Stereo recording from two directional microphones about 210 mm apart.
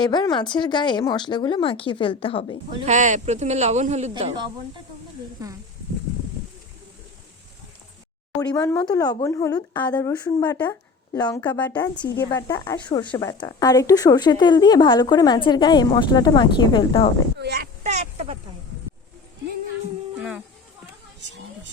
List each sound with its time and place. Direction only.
0.0 s a woman's voice: 20° left (ahead or behind)
2.8 s a man's voice: 35° right (ahead or behind)
4.1 s speech: 20° right (ahead or behind)
5.4 s a sound: 15° right (ahead or behind)
8.4 s a woman's voice: 15° left (ahead or behind)
17.3 s speech: 50° right (ahead or behind)
17.8 s speech: 35° right (ahead or behind)
20.1 s a sound: 5° right (ahead or behind)